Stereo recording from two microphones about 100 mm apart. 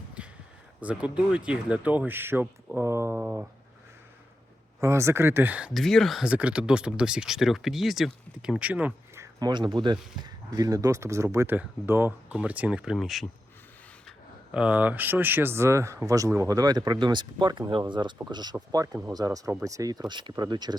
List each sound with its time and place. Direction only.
0.2 s a sound: 10° right (ahead or behind)
0.8 s speech: 15° right (ahead or behind)
3.2 s speech: 15° right (ahead or behind)
4.8 s speech: 30° right (ahead or behind)
5.7 s speech: 5° left (ahead or behind)
6.2 s speech: 10° right (ahead or behind)
9.4 s speech: 45° right (ahead or behind); by 13.2 s centre (ahead or behind)
14.5 s speech: 10° right (ahead or behind); by 20.7 s 45° right (ahead or behind)